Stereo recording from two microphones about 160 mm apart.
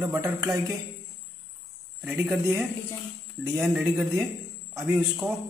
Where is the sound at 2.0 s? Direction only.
5° right (ahead or behind).